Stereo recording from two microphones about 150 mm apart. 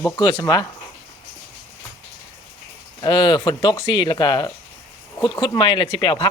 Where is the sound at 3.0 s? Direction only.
30° left (ahead or behind).